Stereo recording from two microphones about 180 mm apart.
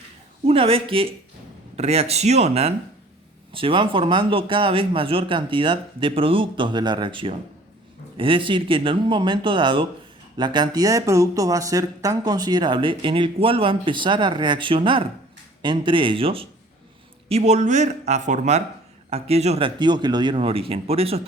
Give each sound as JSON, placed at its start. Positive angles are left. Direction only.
{"t": 0.4, "sound": "speech", "side_deg": -30}